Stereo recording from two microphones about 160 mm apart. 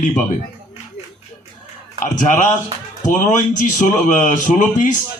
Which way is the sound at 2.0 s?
50° left (ahead or behind).